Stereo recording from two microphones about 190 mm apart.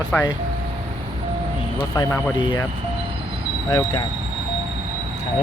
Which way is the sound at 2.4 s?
25° left (ahead or behind).